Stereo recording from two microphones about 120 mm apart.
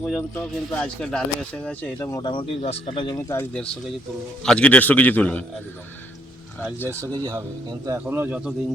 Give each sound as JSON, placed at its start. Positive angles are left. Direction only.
{"t": 0.0, "sound": "speech", "side_deg": 10}
{"t": 2.0, "sound": "speech", "side_deg": 25}
{"t": 2.2, "sound": "speech", "side_deg": 45}
{"t": 4.4, "sound": "speech", "side_deg": 10}
{"t": 6.8, "sound": "speech", "side_deg": -25}
{"t": 7.2, "sound": "speech", "side_deg": -35}
{"t": 7.9, "sound": "speech", "side_deg": -15}